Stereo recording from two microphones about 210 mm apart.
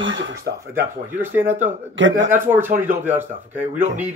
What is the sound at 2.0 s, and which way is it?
Speech, 60° right (ahead or behind).